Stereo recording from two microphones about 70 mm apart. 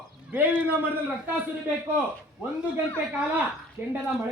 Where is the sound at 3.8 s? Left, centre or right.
Right.